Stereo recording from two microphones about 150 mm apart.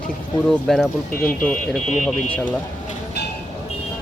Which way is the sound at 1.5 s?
50° left (ahead or behind).